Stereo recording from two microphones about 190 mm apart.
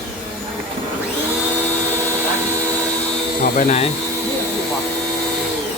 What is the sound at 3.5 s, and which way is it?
Speech, 35° left (ahead or behind).